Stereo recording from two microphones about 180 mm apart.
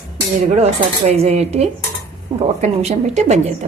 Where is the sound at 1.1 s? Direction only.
35° right (ahead or behind).